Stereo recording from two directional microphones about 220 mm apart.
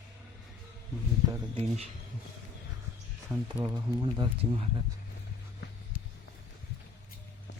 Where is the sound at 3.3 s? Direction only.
10° right (ahead or behind).